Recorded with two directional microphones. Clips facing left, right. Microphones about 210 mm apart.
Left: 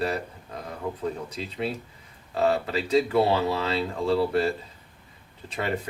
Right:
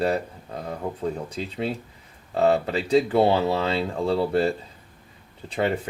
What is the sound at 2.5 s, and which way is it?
Speech, 30° right (ahead or behind).